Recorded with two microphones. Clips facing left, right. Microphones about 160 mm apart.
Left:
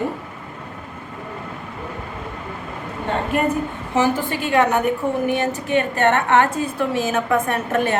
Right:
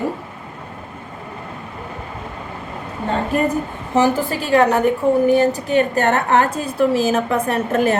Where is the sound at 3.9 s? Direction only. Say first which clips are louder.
Right 3 dB; 40° right (ahead or behind).